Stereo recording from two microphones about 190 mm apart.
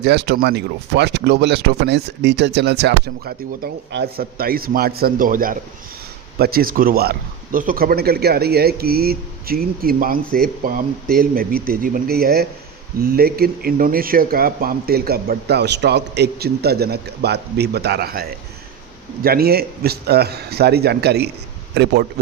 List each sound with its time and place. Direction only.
0.0 s speech: 60° right (ahead or behind)